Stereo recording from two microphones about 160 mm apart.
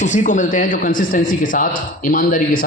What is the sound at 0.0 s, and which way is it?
A man's voice, 50° left (ahead or behind).